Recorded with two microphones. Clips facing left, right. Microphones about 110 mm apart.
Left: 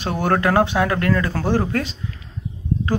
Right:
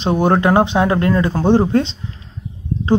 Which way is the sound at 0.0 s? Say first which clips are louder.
Right 5 dB; 20° right (ahead or behind).